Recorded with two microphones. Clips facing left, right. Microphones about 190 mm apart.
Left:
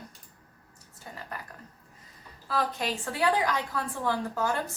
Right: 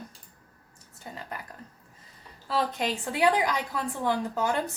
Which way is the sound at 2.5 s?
20° right (ahead or behind).